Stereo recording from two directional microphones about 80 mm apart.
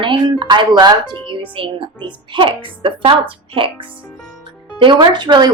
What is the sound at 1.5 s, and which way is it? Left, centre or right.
Speech, right.